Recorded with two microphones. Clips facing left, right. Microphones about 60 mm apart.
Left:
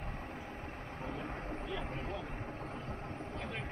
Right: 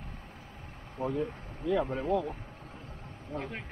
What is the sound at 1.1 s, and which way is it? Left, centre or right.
Speech, left.